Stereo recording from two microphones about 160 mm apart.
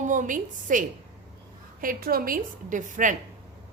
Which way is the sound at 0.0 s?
55° right (ahead or behind).